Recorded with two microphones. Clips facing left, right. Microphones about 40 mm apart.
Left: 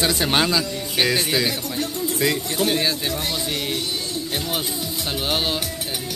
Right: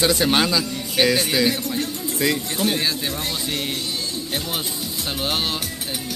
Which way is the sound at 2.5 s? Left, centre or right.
Left.